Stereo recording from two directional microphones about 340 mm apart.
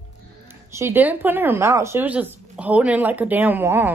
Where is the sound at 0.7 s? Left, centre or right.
Centre.